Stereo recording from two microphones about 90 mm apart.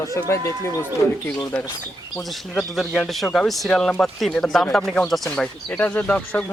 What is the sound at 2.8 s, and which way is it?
Speech, centre (ahead or behind).